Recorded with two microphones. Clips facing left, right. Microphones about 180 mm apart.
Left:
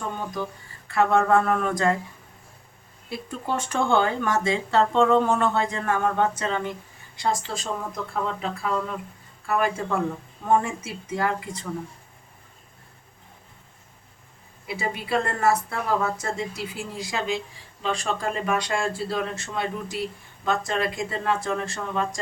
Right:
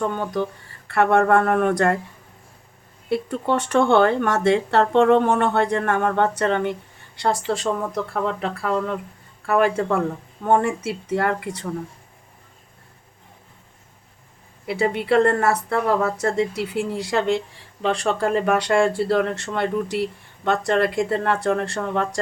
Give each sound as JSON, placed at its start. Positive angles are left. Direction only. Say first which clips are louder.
{"t": 0.1, "sound": "speech", "louder": "right 6 dB", "side_deg": -70}
{"t": 3.1, "sound": "speech", "louder": "right 8 dB", "side_deg": -70}
{"t": 14.7, "sound": "speech", "louder": "right 7 dB", "side_deg": -70}